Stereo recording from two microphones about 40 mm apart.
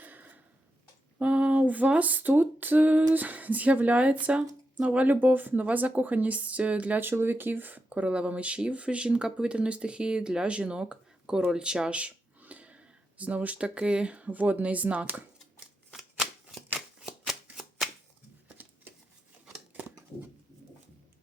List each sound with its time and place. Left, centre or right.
0.0 s a sound: right
1.2 s a sound: right
3.2 s speech: right
5.2 s speech: right
7.0 s speech: right
7.9 s speech: right
15.9 s shuffling cards: centre
17.2 s shuffling cards: centre